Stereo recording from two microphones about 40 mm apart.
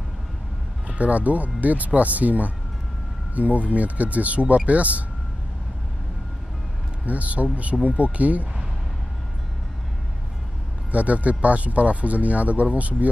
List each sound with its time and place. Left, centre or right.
0.8 s speech: right
7.1 s speech: right
10.9 s speech: right